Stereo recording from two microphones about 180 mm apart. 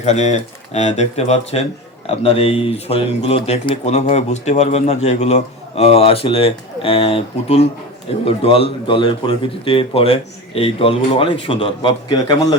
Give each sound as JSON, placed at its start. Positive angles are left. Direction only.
{"t": 0.0, "sound": "speech", "side_deg": 40}